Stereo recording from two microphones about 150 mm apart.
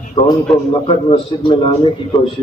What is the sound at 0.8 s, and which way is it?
A man's voice, 35° left (ahead or behind).